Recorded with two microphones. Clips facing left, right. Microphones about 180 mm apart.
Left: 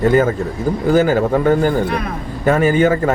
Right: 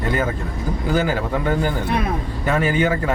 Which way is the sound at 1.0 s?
45° left (ahead or behind).